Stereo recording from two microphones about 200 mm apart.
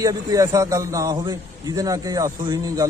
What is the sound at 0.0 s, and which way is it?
A man's voice, 20° right (ahead or behind).